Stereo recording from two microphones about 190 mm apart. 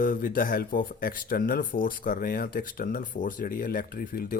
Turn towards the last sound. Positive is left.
turn(degrees=50)  # may be behind; listen again after turning